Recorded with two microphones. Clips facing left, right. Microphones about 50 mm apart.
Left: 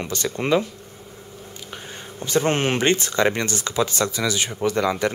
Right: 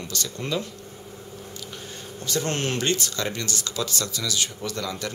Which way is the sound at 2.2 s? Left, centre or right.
Left.